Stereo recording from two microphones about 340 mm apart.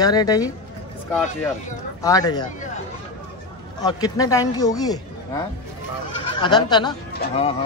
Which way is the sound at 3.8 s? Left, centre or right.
Centre.